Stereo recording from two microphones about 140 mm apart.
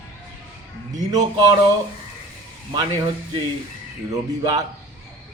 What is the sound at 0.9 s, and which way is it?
Speech, 30° right (ahead or behind).